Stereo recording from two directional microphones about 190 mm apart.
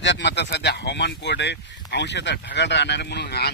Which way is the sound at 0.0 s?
65° left (ahead or behind).